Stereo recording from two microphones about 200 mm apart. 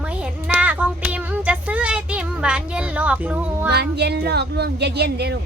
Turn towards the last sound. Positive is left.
turn(degrees=-55)  # may be behind; listen again after turning